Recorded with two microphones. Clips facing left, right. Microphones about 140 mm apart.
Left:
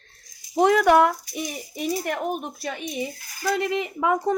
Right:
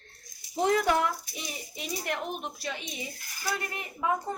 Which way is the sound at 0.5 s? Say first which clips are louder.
Left 8 dB; 75° left (ahead or behind).